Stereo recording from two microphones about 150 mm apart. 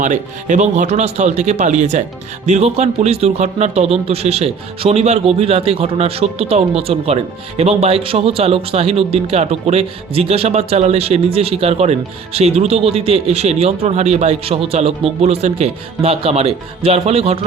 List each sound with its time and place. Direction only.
0.0 s a man's voice: 55° right (ahead or behind)